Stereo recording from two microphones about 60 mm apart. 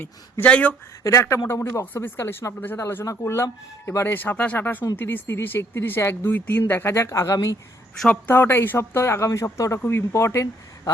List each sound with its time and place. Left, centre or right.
0.4 s speech: left
1.0 s speech: left
1.8 s speech: left
2.5 s speech: left
3.0 s speech: left
7.2 s speech: left
8.1 s speech: left
8.8 s speech: left
9.8 s speech: left